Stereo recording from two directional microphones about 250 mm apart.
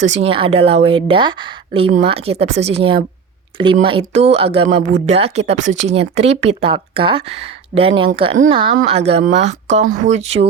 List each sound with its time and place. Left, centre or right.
0.0 s speech: right